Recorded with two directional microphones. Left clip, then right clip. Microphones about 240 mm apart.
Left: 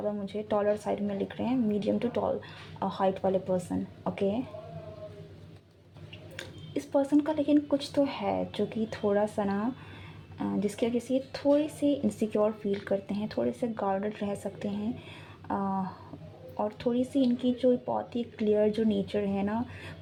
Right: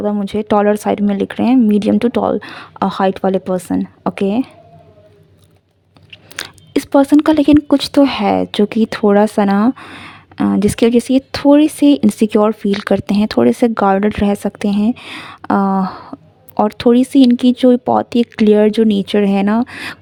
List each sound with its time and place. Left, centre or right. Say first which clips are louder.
0.0 s speech: right 15 dB; right
6.1 s speech: right 16 dB; right